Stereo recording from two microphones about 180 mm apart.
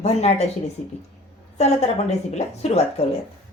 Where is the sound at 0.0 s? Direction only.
35° left (ahead or behind).